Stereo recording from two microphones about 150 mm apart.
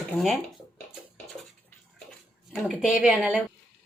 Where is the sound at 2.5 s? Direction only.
Centre (ahead or behind).